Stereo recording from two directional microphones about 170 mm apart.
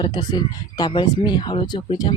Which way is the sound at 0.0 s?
25° left (ahead or behind).